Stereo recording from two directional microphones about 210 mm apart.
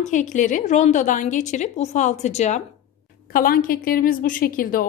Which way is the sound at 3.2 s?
45° left (ahead or behind).